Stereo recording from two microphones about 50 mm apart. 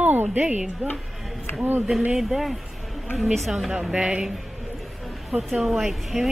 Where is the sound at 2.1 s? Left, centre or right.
Centre.